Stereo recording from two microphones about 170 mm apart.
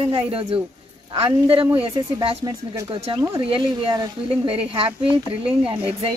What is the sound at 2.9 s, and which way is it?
Speech, 30° right (ahead or behind).